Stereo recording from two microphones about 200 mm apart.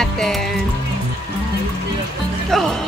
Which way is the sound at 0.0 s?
Centre (ahead or behind).